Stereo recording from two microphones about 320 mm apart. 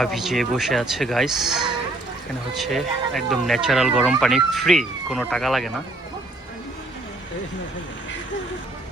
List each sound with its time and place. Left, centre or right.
0.0 s speech: centre